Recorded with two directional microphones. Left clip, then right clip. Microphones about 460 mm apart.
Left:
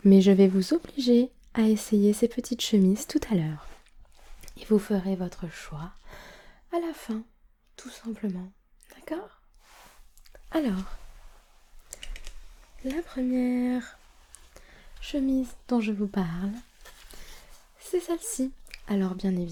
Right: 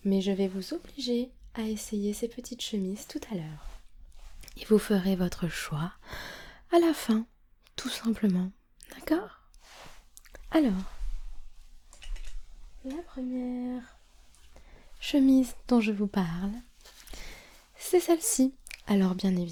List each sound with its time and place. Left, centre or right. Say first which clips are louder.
0.0 s speech: left 10 dB; left
4.4 s a sound: right 1 dB; centre
4.9 s speech: right 1 dB; right
8.9 s whispering: right 6 dB; right
10.2 s a sound: right 3 dB; right
13.3 s speech: left 8 dB; centre
15.0 s speech: right 4 dB; right; by 16.6 s centre
17.1 s a sound: right 4 dB; right
17.9 s speech: right 5 dB; right